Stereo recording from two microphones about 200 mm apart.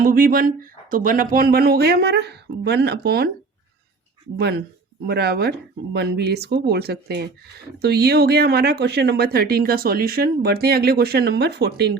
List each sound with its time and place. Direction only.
0.0 s speech: 45° right (ahead or behind)
5.0 s speech: 55° right (ahead or behind)